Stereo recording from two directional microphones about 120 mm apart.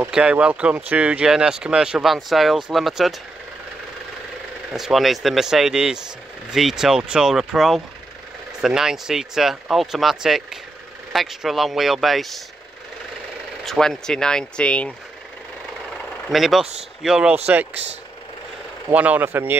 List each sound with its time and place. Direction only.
0.1 s speech: 10° right (ahead or behind)
4.7 s speech: centre (ahead or behind)
13.7 s speech: 5° left (ahead or behind)
16.3 s speech: centre (ahead or behind)
18.9 s speech: 15° right (ahead or behind)